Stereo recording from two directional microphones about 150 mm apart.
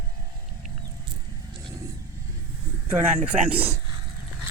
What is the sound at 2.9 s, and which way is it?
Speech, 15° right (ahead or behind).